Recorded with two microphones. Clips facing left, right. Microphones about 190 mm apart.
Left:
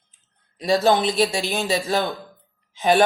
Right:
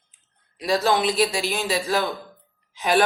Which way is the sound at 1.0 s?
25° left (ahead or behind).